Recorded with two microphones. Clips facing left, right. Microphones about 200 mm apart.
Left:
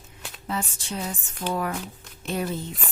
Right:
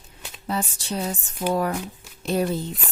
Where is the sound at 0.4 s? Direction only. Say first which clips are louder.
Right 3 dB; 35° right (ahead or behind).